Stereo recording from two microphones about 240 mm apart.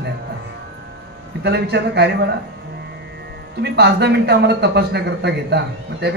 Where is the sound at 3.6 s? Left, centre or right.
Right.